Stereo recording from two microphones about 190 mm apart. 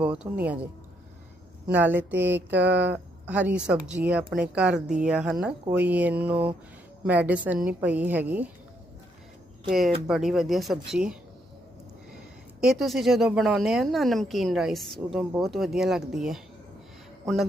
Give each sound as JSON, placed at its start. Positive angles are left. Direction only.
{"t": 0.0, "sound": "a woman's voice", "side_deg": -5}
{"t": 1.6, "sound": "a woman's voice", "side_deg": -10}
{"t": 2.5, "sound": "speech", "side_deg": -65}
{"t": 2.7, "sound": "a woman's voice", "side_deg": -10}
{"t": 9.6, "sound": "speech", "side_deg": 0}
{"t": 12.5, "sound": "speech", "side_deg": 0}